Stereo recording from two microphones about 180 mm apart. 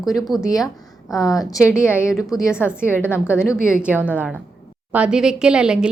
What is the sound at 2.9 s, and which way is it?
Speech, 10° left (ahead or behind).